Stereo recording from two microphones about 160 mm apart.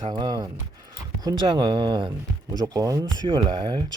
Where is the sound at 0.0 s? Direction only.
30° right (ahead or behind).